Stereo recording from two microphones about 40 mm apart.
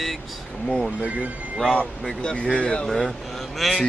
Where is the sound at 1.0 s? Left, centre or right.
Right.